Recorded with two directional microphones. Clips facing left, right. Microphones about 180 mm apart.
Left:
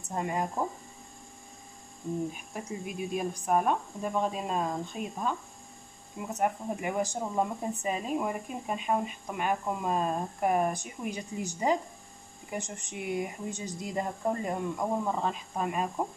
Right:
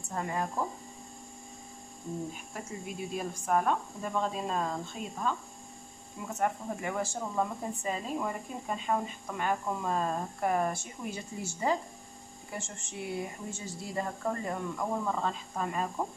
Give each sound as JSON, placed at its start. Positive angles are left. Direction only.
{"t": 0.0, "sound": "speech", "side_deg": 20}
{"t": 2.5, "sound": "speech", "side_deg": 15}